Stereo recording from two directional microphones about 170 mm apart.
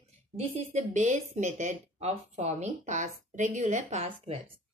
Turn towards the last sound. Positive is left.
turn(degrees=-35)  # may be behind; listen again after turning